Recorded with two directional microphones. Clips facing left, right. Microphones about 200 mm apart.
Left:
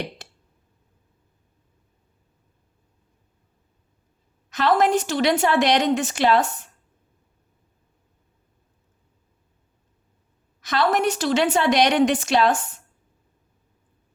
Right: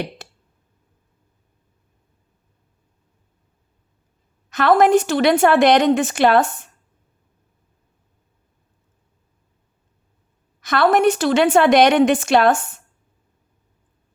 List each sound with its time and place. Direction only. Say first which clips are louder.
4.5 s a woman's voice: right 5 dB; 55° right (ahead or behind)
10.6 s a woman's voice: right 5 dB; 55° right (ahead or behind)